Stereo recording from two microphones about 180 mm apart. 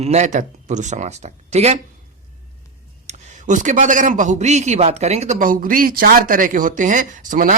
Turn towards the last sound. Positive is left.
turn(degrees=-45)  # may be behind; listen again after turning